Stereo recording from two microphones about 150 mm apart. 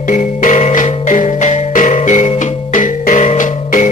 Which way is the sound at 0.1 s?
60° left (ahead or behind).